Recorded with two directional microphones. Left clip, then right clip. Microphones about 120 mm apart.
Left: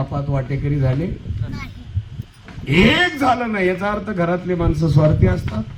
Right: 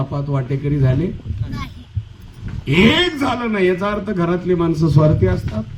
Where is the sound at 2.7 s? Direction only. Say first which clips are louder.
Even; 15° left (ahead or behind).